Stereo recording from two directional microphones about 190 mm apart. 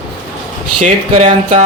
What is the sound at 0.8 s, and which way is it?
Speech, 35° right (ahead or behind).